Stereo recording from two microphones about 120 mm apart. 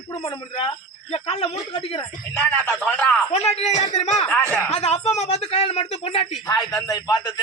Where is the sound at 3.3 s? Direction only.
60° left (ahead or behind).